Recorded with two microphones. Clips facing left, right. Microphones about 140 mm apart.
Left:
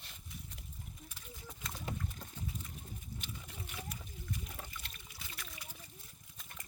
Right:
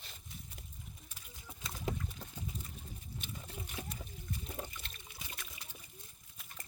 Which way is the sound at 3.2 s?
25° right (ahead or behind).